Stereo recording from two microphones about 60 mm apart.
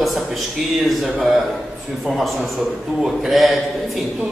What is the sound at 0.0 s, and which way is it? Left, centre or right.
Speech, centre.